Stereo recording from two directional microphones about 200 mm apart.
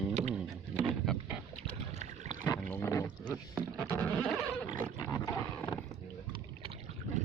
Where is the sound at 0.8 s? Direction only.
5° right (ahead or behind).